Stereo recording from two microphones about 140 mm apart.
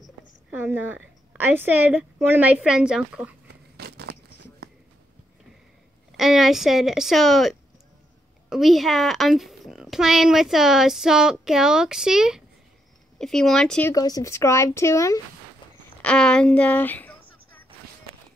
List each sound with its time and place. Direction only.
0.5 s a woman's voice: 15° right (ahead or behind)
6.1 s a child's voice: centre (ahead or behind)
13.9 s speech: 25° left (ahead or behind)
16.0 s a sound: 5° left (ahead or behind)